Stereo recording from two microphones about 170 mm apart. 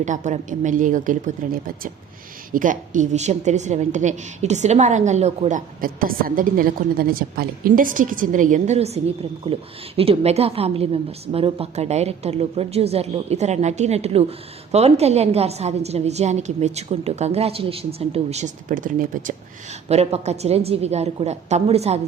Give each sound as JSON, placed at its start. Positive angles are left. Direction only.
{"t": 0.0, "sound": "a woman's voice", "side_deg": -45}
{"t": 19.9, "sound": "a woman's voice", "side_deg": -40}